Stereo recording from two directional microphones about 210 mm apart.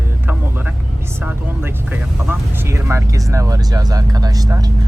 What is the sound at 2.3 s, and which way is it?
Vehicle, 15° right (ahead or behind).